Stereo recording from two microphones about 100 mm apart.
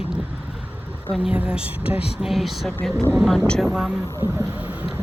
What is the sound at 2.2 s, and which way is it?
Music, centre (ahead or behind).